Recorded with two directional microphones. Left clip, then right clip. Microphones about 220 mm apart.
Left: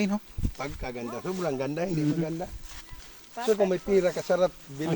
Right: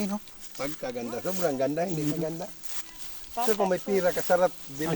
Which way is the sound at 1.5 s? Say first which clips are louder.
Right 2 dB; 30° left (ahead or behind).